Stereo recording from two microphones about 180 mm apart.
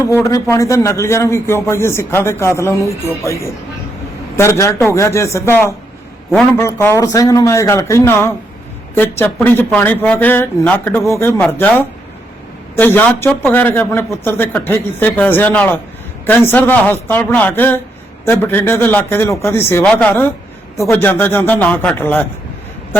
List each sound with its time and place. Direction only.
0.1 s speech: 15° left (ahead or behind)